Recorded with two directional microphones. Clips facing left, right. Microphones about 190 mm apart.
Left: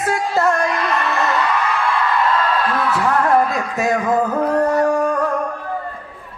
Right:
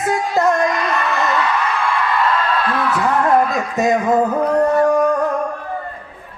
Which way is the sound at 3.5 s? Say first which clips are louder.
Right 2 dB; 20° right (ahead or behind).